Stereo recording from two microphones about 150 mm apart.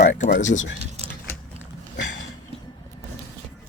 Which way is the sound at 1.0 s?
45° right (ahead or behind).